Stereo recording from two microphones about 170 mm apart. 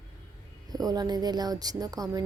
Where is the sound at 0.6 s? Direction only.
20° right (ahead or behind).